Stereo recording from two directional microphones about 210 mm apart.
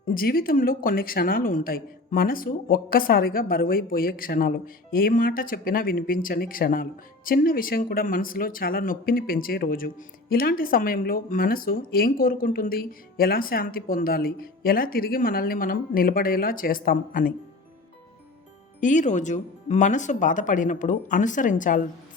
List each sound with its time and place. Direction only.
0.1 s speech: 45° left (ahead or behind)
18.8 s speech: 35° left (ahead or behind)